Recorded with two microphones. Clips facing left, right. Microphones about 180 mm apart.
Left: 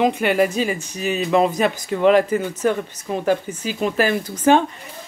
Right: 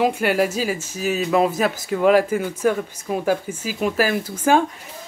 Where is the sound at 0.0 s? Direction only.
5° right (ahead or behind).